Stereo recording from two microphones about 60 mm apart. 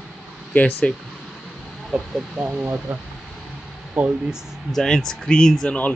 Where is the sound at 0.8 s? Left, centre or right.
Left.